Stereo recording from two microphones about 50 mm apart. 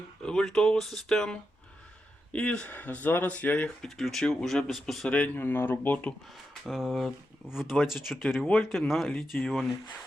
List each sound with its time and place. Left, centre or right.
0.2 s speech: centre
0.4 s speech: centre
2.3 s speech: left
3.8 s speech: centre
5.0 s speech: left
5.4 s speech: left
6.7 s speech: centre